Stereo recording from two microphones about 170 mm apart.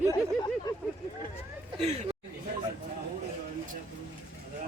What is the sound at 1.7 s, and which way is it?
Speech, 35° right (ahead or behind).